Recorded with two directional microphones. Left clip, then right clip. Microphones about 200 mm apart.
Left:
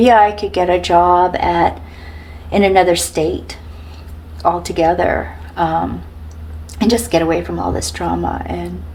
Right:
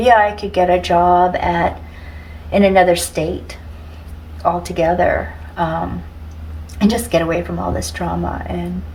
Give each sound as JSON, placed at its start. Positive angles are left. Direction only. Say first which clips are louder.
{"t": 0.0, "sound": "speech", "louder": "left 2 dB", "side_deg": 30}
{"t": 6.7, "sound": "speech", "louder": "left 2 dB", "side_deg": 30}